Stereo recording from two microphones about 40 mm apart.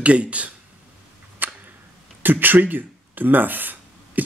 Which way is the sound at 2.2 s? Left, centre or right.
Right.